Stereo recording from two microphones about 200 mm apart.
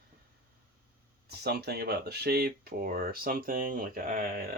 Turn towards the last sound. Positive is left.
turn(degrees=-50)  # may be behind; listen again after turning